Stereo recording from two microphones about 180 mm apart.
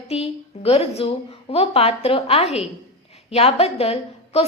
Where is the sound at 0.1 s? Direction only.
35° left (ahead or behind).